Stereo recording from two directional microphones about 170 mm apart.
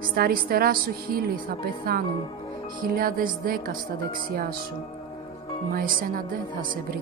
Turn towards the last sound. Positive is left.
turn(degrees=-55)  # may be behind; listen again after turning